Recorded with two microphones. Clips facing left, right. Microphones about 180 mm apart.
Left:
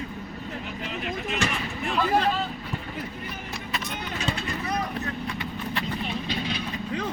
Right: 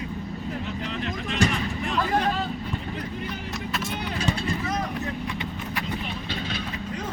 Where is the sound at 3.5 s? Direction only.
Centre (ahead or behind).